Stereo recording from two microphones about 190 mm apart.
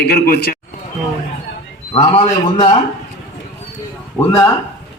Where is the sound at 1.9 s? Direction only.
30° left (ahead or behind).